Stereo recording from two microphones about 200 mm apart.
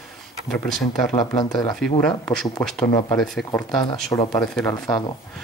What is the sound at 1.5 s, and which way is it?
Speech, centre (ahead or behind).